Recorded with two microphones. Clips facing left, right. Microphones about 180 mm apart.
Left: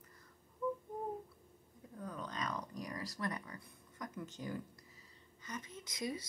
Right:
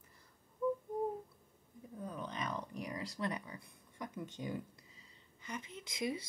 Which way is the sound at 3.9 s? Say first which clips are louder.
Right 1 dB; 25° right (ahead or behind).